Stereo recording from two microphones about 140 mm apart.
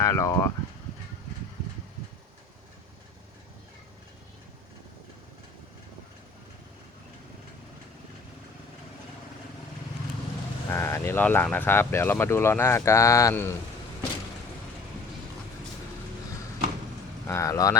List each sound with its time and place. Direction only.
0.0 s speech: 20° left (ahead or behind)
10.7 s speech: 20° left (ahead or behind)
17.2 s speech: 20° left (ahead or behind)